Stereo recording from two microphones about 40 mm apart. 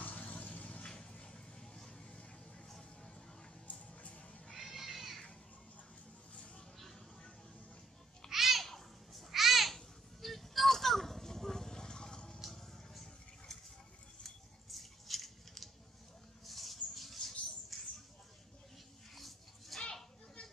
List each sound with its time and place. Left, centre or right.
0.0 s vehicle: left
0.8 s music: left
3.7 s music: left
4.6 s cat: centre
6.3 s a sound: left
8.3 s babbling: centre
10.2 s a sound: centre
17.7 s mouse: centre
19.1 s a sound: centre
19.8 s children playing: centre